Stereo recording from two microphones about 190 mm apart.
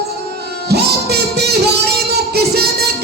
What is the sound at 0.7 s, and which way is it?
Music, 60° right (ahead or behind).